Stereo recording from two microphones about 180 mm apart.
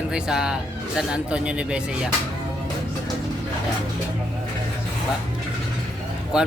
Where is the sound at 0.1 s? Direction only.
5° right (ahead or behind).